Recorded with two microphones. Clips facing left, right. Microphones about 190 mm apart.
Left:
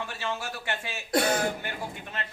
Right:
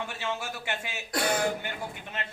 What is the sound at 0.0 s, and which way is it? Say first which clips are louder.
A man's voice: even; 15° right (ahead or behind).